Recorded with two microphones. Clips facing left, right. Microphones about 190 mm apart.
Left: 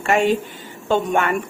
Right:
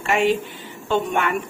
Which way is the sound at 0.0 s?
45° left (ahead or behind).